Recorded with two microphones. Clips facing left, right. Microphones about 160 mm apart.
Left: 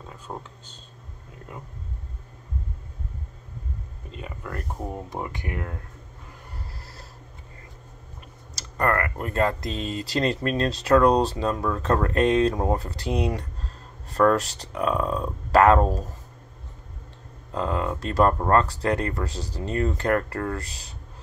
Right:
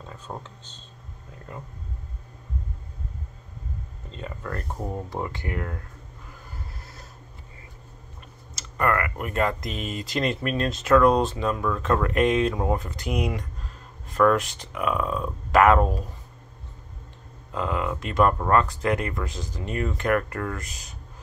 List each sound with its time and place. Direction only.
0.3 s speech: centre (ahead or behind)
4.1 s speech: 10° left (ahead or behind)
8.5 s speech: 35° left (ahead or behind)
17.5 s speech: 35° left (ahead or behind)